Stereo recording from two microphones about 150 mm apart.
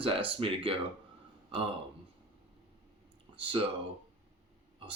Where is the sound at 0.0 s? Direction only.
35° right (ahead or behind).